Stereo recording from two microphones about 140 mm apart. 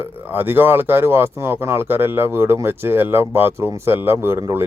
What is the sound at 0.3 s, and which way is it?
Speech, 15° right (ahead or behind).